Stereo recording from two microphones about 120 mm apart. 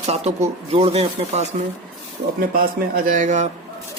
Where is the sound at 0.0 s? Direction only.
65° right (ahead or behind).